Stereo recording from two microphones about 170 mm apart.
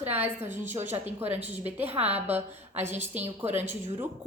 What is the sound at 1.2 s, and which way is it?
Speech, 40° right (ahead or behind).